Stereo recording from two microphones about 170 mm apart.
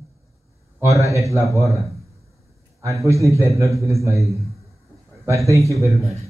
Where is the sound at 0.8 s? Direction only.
20° right (ahead or behind).